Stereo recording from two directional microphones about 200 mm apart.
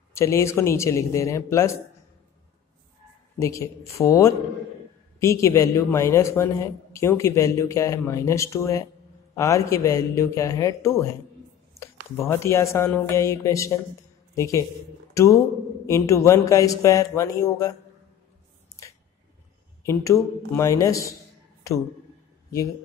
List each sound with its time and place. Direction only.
0.1 s speech: 15° left (ahead or behind)
3.3 s a man's voice: 15° left (ahead or behind)
19.8 s speech: 15° left (ahead or behind)